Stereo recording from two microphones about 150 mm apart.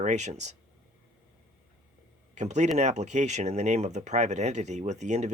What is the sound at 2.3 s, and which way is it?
Speech, 50° right (ahead or behind).